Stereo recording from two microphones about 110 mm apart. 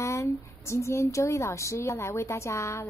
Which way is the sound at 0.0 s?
25° left (ahead or behind).